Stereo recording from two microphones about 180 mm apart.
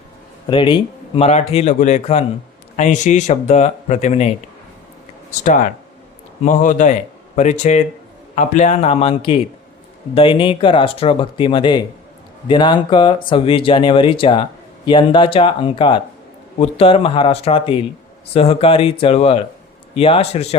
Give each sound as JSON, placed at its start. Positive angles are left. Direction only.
{"t": 0.5, "sound": "a man's voice", "side_deg": 30}
{"t": 6.4, "sound": "a man's voice", "side_deg": 45}